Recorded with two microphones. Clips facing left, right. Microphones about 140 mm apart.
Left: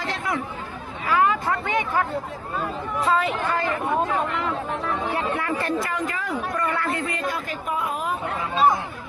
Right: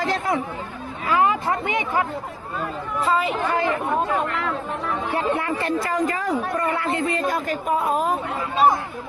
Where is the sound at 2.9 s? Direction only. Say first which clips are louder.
Right 1 dB; centre (ahead or behind).